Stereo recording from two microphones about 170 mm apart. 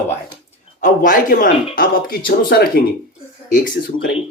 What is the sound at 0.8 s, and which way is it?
Speech, 50° left (ahead or behind).